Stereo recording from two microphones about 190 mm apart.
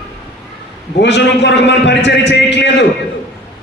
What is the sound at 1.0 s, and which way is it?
A man's voice, 65° left (ahead or behind).